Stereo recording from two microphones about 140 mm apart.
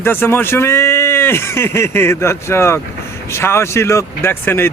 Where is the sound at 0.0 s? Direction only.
15° left (ahead or behind).